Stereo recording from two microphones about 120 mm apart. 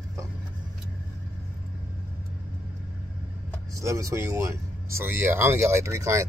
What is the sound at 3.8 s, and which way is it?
Speech, 25° right (ahead or behind).